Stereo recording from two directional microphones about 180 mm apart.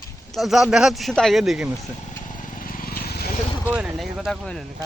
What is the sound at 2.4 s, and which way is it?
Vehicle, 50° left (ahead or behind).